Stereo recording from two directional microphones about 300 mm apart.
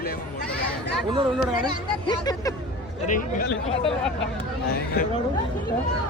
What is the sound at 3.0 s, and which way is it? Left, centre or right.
Speech, left.